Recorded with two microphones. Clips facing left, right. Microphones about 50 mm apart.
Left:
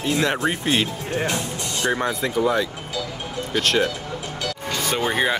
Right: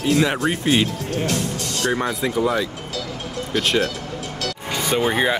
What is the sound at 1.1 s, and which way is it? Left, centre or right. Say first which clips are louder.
Speech: left 1 dB; centre.